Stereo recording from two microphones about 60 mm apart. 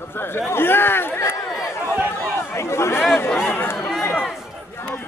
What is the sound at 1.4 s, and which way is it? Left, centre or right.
Speech, left.